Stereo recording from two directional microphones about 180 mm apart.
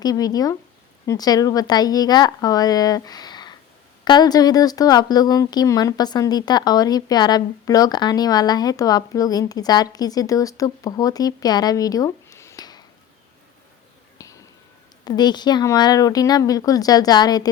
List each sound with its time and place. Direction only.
0.0 s speech: 20° left (ahead or behind)
14.2 s a sound: 20° left (ahead or behind)
15.0 s speech: 25° left (ahead or behind)